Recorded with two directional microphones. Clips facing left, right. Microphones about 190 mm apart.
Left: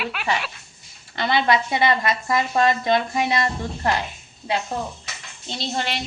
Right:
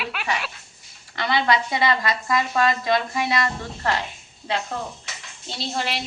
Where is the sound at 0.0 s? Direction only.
Centre (ahead or behind).